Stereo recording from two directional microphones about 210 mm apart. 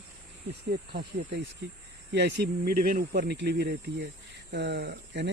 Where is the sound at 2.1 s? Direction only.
55° right (ahead or behind).